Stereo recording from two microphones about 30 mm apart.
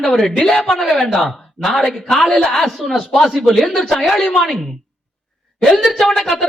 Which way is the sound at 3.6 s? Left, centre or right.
Centre.